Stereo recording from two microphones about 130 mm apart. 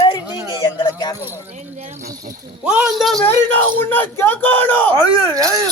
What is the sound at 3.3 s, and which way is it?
Speech, 15° left (ahead or behind).